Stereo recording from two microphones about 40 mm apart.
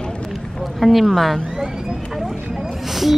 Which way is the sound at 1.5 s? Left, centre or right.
Centre.